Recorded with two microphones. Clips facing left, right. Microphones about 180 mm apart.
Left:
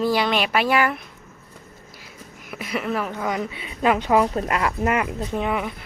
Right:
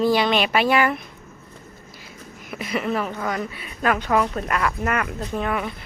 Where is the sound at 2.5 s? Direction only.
5° left (ahead or behind).